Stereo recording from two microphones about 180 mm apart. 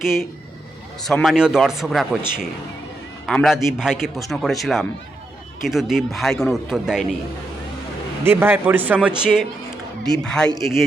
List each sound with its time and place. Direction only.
0.0 s a man's voice: centre (ahead or behind)
3.2 s a man's voice: centre (ahead or behind)
8.2 s a man's voice: 10° right (ahead or behind); by 10.5 s 5° left (ahead or behind)
10.5 s speech: 15° left (ahead or behind)